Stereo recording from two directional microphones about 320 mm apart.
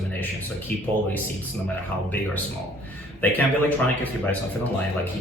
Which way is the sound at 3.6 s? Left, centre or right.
Centre.